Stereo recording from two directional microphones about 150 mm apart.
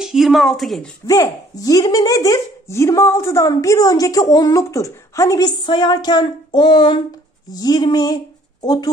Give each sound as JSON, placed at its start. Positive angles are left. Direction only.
{"t": 0.0, "sound": "speech", "side_deg": 0}
{"t": 1.0, "sound": "speech", "side_deg": 25}